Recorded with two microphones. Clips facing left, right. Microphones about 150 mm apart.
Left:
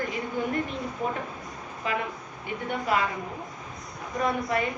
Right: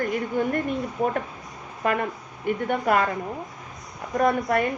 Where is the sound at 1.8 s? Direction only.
55° right (ahead or behind).